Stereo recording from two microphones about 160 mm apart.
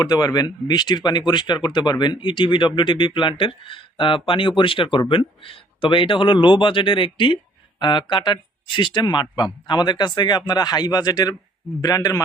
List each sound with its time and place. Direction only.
0.0 s speech: 25° left (ahead or behind)